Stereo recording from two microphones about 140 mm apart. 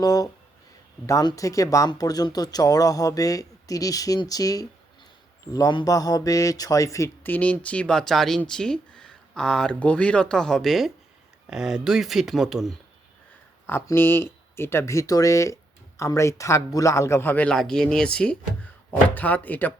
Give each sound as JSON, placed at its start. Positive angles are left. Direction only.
{"t": 0.0, "sound": "speech", "side_deg": 25}
{"t": 13.7, "sound": "speech", "side_deg": 15}